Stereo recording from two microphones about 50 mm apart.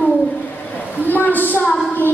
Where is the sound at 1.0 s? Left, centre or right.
Left.